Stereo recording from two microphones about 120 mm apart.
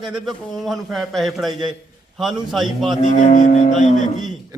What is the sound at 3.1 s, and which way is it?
Music, 85° left.